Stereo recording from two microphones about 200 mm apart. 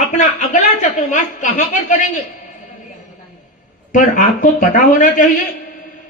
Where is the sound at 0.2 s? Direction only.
40° left (ahead or behind).